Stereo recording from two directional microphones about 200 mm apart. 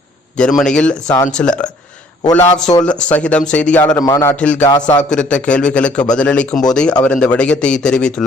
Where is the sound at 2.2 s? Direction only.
30° left (ahead or behind).